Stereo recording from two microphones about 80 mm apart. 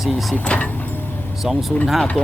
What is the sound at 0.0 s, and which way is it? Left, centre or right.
Speech, centre.